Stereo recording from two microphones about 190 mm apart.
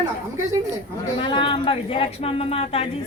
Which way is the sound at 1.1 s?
25° left (ahead or behind).